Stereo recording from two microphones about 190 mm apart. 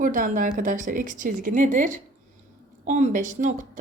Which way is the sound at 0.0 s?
45° right (ahead or behind).